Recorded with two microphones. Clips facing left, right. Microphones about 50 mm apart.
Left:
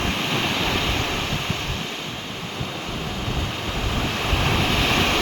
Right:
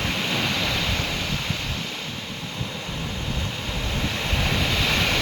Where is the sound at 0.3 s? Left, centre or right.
Centre.